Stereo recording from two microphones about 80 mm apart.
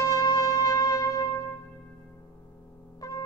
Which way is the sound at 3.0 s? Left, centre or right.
Left.